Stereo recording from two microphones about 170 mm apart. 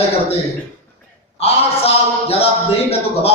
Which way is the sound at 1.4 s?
35° left (ahead or behind).